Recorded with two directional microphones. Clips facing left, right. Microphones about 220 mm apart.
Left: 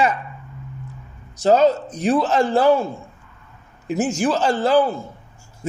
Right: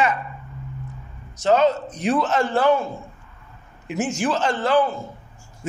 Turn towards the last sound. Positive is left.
turn(degrees=35)  # may be behind; listen again after turning